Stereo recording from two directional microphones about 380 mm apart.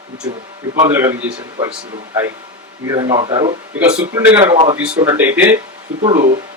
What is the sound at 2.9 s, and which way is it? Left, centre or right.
Speech, centre.